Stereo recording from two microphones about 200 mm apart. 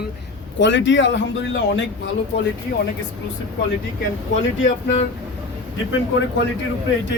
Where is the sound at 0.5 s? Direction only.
65° left (ahead or behind).